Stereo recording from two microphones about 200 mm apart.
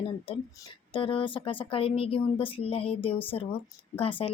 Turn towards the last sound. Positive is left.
turn(degrees=25)  # may be behind; listen again after turning